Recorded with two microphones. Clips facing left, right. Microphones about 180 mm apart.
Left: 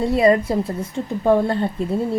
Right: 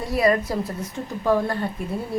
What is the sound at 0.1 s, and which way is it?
A woman's voice, 25° left (ahead or behind).